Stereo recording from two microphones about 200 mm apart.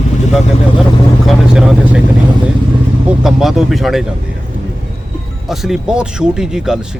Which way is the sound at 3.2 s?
Centre (ahead or behind).